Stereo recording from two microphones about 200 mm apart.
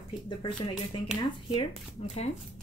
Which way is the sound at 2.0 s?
30° left (ahead or behind).